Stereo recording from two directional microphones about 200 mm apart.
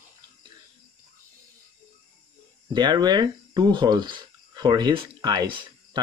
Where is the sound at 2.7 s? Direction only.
20° right (ahead or behind).